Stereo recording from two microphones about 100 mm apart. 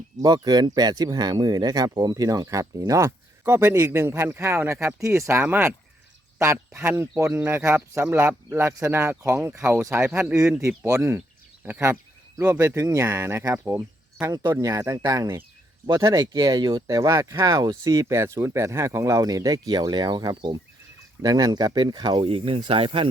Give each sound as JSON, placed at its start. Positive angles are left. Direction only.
{"t": 0.4, "sound": "speech", "side_deg": -40}
{"t": 6.8, "sound": "speech", "side_deg": -25}
{"t": 16.8, "sound": "speech", "side_deg": -35}
{"t": 21.2, "sound": "speech", "side_deg": -40}